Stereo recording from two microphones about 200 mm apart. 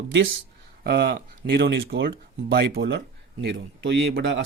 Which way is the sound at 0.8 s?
55° right (ahead or behind).